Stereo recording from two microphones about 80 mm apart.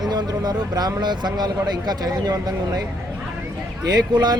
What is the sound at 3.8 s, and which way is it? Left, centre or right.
Speech, right.